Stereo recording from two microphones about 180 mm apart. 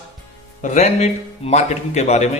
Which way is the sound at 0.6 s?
40° left (ahead or behind).